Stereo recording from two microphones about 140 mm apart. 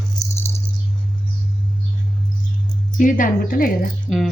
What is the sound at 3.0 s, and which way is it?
Speech, 70° left (ahead or behind).